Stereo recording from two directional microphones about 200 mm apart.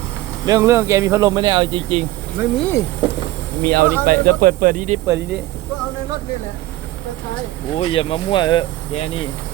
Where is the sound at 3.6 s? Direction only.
50° right (ahead or behind).